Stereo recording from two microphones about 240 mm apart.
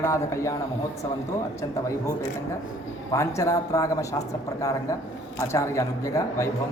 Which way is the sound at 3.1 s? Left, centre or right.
Centre.